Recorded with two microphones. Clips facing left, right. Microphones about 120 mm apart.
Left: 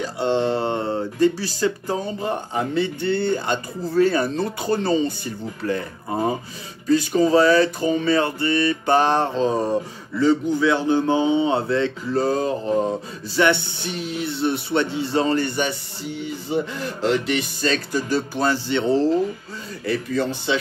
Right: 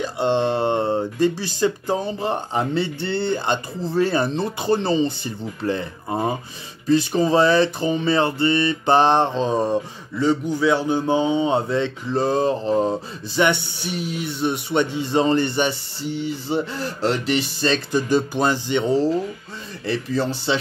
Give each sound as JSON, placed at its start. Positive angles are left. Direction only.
{"t": 0.0, "sound": "speech", "side_deg": -20}
{"t": 19.9, "sound": "speech", "side_deg": -30}